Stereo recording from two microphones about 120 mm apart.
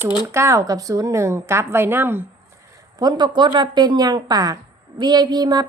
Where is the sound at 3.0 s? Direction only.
35° right (ahead or behind).